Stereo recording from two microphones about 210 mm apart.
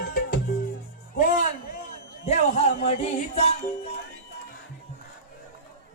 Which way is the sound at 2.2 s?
30° left (ahead or behind).